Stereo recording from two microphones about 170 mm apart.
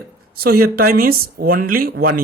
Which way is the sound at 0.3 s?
65° right (ahead or behind).